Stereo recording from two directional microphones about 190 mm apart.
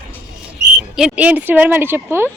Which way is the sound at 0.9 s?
5° right (ahead or behind).